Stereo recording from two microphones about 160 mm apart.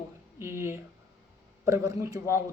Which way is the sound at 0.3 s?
15° right (ahead or behind).